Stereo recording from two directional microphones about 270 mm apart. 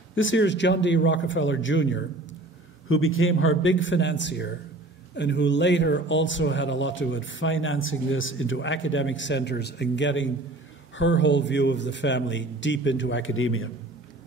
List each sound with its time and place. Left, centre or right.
0.1 s speech: left